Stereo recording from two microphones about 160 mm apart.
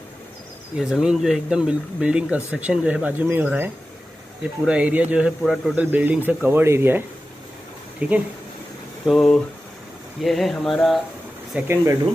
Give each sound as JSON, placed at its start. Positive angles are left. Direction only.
{"t": 0.7, "sound": "speech", "side_deg": -5}
{"t": 8.0, "sound": "speech", "side_deg": -10}
{"t": 11.5, "sound": "speech", "side_deg": -15}